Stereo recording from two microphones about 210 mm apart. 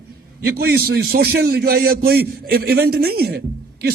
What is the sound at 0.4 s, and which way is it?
A man's voice, 45° right (ahead or behind).